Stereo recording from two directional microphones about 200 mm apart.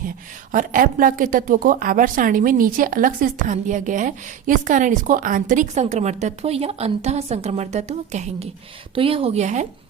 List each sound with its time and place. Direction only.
0.5 s a woman's voice: 40° right (ahead or behind)